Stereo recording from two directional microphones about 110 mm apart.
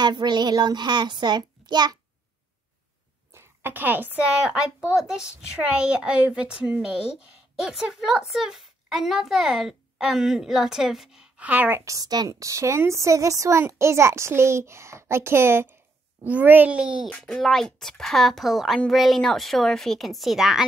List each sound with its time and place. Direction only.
0.0 s a child's voice: 40° right (ahead or behind)
3.3 s a woman's voice: 15° right (ahead or behind)
11.8 s a woman's voice: 30° right (ahead or behind); by 17.1 s 10° right (ahead or behind)
17.2 s a woman's voice: 5° left (ahead or behind)